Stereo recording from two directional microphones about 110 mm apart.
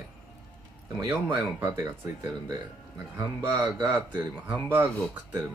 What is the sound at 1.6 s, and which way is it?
Speech, 25° right (ahead or behind).